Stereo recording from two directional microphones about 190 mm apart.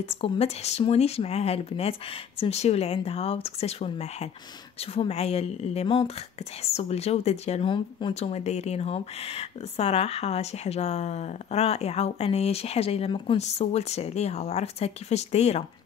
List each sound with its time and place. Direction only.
0.1 s speech: 30° left (ahead or behind)